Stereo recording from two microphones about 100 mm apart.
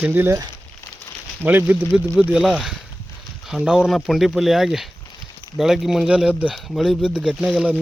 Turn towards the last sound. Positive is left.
turn(degrees=-5)  # may be behind; listen again after turning